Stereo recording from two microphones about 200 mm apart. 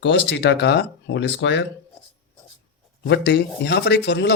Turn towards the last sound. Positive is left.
turn(degrees=60)  # may be behind; listen again after turning